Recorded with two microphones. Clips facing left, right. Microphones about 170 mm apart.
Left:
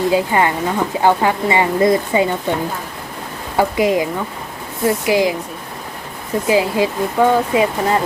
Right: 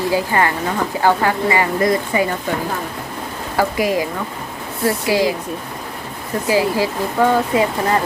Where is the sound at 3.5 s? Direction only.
20° left (ahead or behind).